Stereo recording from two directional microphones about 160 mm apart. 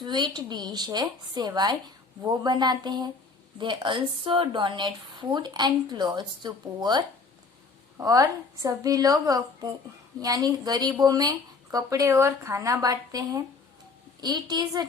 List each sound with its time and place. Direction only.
0.0 s speech: 25° right (ahead or behind)